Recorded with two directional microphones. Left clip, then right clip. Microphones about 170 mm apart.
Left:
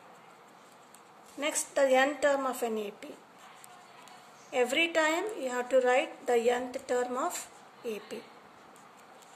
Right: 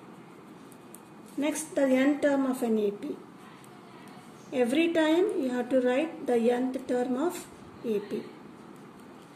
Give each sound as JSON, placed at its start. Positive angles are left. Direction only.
{"t": 1.4, "sound": "a woman's voice", "side_deg": 55}
{"t": 4.5, "sound": "a woman's voice", "side_deg": 55}